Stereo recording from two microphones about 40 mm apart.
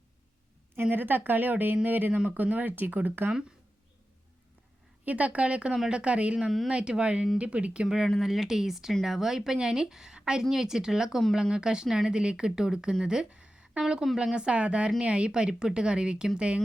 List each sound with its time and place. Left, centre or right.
0.8 s a woman's voice: right
5.0 s speech: right
8.2 s speech: centre